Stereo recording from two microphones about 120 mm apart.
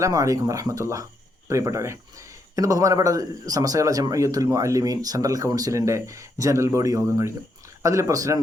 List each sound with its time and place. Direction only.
0.0 s a man's voice: 30° right (ahead or behind)